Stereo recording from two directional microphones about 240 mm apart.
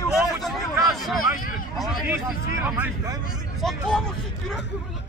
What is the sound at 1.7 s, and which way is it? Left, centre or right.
Speech, centre.